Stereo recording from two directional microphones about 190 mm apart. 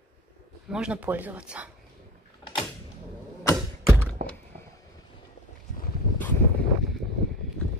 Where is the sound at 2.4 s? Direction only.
25° left (ahead or behind).